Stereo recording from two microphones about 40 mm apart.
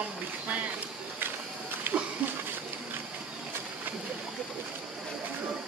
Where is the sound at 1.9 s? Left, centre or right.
Right.